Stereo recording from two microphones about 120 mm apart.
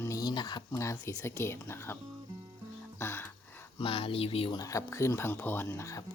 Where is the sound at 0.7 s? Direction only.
25° left (ahead or behind).